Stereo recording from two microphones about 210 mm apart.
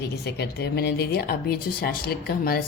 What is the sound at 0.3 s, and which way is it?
Speech, 55° left (ahead or behind).